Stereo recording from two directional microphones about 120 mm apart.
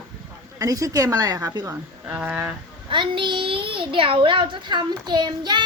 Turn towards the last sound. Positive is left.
turn(degrees=-40)  # may be behind; listen again after turning